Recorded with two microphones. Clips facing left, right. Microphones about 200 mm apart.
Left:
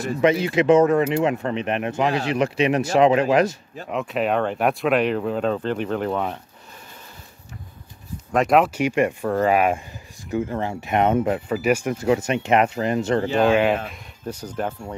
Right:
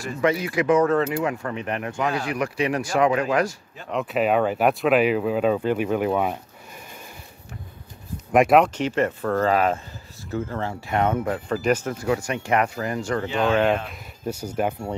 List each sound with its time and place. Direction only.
0.2 s speech: 25° left (ahead or behind)
3.9 s speech: centre (ahead or behind)
8.5 s speech: 5° left (ahead or behind); by 11.4 s 20° left (ahead or behind)
11.4 s speech: 5° left (ahead or behind)
12.0 s speech: 20° left (ahead or behind)
13.5 s speech: 10° left (ahead or behind)
14.2 s speech: 10° right (ahead or behind)